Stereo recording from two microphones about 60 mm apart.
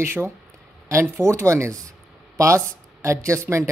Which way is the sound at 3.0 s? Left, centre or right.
Right.